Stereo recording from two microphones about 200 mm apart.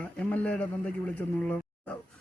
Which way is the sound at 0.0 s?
5° left (ahead or behind).